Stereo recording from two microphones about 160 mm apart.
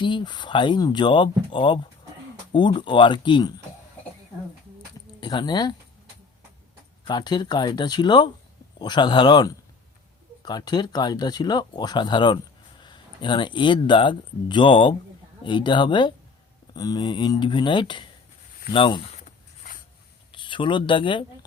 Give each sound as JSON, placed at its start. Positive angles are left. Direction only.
{"t": 0.0, "sound": "speech", "side_deg": 30}
{"t": 5.2, "sound": "speech", "side_deg": 25}
{"t": 7.0, "sound": "speech", "side_deg": 30}
{"t": 19.2, "sound": "a sound", "side_deg": 60}
{"t": 20.3, "sound": "speech", "side_deg": 30}